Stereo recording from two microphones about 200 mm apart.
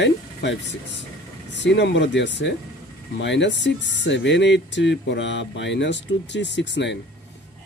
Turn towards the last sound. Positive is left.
turn(degrees=60)  # may be behind; listen again after turning